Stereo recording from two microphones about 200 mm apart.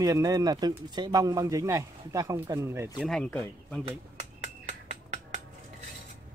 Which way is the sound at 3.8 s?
35° right (ahead or behind).